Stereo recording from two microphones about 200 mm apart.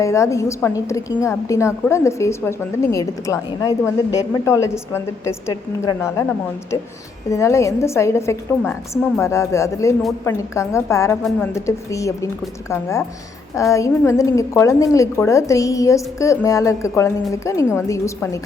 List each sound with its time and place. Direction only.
0.0 s a woman's voice: 15° left (ahead or behind)
7.3 s a woman's voice: 15° left (ahead or behind)
11.2 s a woman's voice: centre (ahead or behind)
11.5 s a woman's voice: 15° left (ahead or behind)